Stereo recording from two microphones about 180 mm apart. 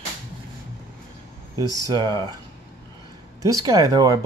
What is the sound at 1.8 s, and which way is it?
Speech, 25° right (ahead or behind).